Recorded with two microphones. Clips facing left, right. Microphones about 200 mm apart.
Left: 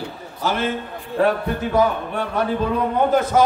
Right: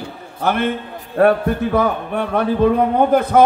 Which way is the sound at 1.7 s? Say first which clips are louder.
Right 1 dB; 60° right (ahead or behind).